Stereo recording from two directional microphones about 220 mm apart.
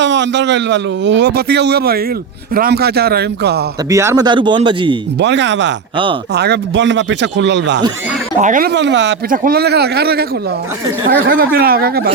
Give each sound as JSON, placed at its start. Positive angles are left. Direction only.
{"t": 0.0, "sound": "a man's voice", "side_deg": -55}
{"t": 3.8, "sound": "speech", "side_deg": -15}
{"t": 5.2, "sound": "a man's voice", "side_deg": -55}
{"t": 8.4, "sound": "a man's voice", "side_deg": -35}
{"t": 9.3, "sound": "a man's voice", "side_deg": -40}
{"t": 11.3, "sound": "a man's voice", "side_deg": -45}